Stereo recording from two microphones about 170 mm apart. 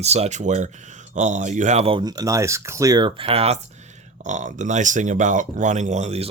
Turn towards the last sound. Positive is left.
turn(degrees=-40)  # may be behind; listen again after turning